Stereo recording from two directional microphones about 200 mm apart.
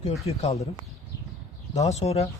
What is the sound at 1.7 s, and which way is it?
Speech, 35° left (ahead or behind).